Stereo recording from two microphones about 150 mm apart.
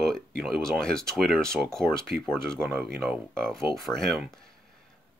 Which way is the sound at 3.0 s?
5° left (ahead or behind).